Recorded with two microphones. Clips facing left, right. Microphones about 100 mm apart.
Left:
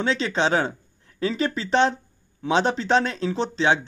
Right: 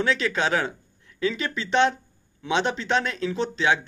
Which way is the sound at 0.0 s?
25° left (ahead or behind).